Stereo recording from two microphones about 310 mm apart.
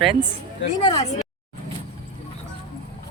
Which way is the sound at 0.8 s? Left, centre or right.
Left.